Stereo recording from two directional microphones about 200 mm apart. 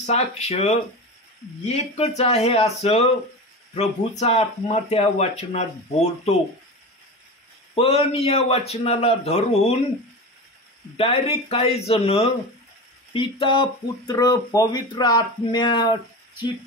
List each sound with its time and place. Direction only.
0.0 s speech: 35° left (ahead or behind)
7.7 s speech: 30° left (ahead or behind)
11.0 s speech: 30° left (ahead or behind)